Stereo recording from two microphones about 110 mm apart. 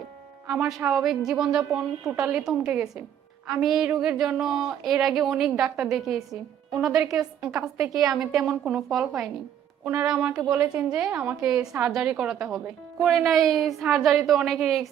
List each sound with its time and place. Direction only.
0.4 s a woman's voice: 10° right (ahead or behind)
9.8 s a woman's voice: 20° right (ahead or behind); by 14.8 s centre (ahead or behind)